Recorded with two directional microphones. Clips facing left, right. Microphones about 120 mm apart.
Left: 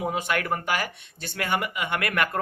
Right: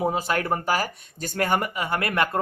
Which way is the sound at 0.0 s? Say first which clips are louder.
Right 3 dB; 35° right (ahead or behind).